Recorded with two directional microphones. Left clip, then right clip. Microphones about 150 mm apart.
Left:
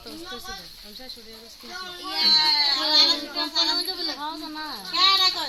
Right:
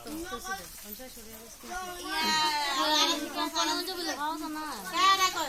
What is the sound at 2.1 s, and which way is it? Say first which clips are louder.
Speech: left 8 dB; 35° left (ahead or behind).